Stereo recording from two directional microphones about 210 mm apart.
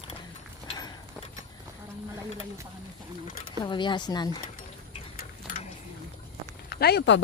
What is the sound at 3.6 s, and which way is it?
Speech, 20° left (ahead or behind).